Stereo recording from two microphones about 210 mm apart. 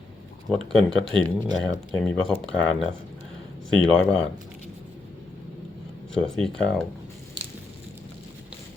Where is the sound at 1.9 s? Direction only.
Centre (ahead or behind).